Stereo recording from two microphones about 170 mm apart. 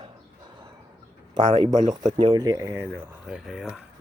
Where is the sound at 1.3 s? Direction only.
35° right (ahead or behind).